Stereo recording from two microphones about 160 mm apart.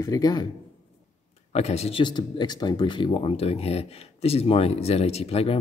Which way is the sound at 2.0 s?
25° left (ahead or behind).